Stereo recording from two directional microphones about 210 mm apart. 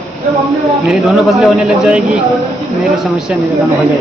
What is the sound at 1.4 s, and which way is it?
Speech, 5° right (ahead or behind).